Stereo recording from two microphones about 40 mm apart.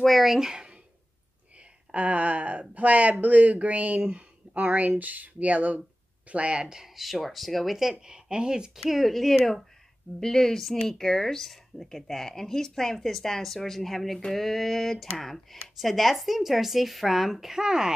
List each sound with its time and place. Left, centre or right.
0.0 s speech: centre
2.0 s speech: right
6.6 s speech: centre
7.0 s speech: centre
7.9 s speech: right
8.7 s speech: centre
17.5 s speech: centre